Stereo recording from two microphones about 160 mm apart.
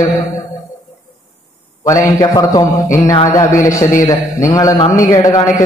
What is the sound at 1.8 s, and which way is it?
A man's voice, 25° left (ahead or behind).